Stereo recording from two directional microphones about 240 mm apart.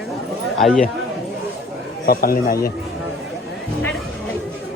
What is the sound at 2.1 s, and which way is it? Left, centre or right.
Speech, left.